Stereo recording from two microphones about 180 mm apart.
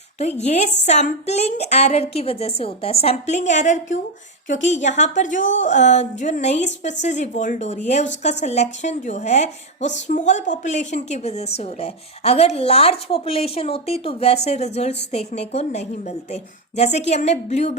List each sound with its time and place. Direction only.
0.2 s a woman's voice: 40° left (ahead or behind)